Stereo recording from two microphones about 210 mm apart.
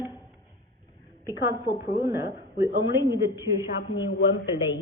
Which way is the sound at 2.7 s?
60° left (ahead or behind).